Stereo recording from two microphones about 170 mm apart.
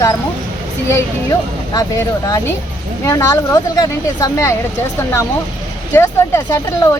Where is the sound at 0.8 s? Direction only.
20° left (ahead or behind).